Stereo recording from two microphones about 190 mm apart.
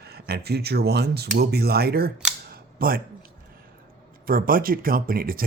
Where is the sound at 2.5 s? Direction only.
50° right (ahead or behind).